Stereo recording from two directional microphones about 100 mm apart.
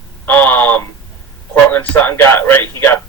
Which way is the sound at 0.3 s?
20° left (ahead or behind).